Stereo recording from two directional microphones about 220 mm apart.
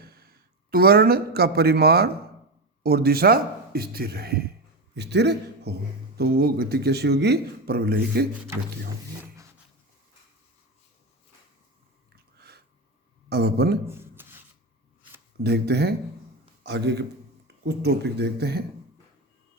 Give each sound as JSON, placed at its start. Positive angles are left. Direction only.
{"t": 0.0, "sound": "a man's voice", "side_deg": -45}
{"t": 13.2, "sound": "speech", "side_deg": -50}
{"t": 13.8, "sound": "a sound", "side_deg": -10}
{"t": 15.4, "sound": "speech", "side_deg": -45}